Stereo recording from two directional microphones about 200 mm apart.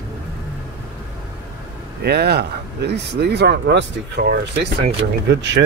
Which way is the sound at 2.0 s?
55° right (ahead or behind).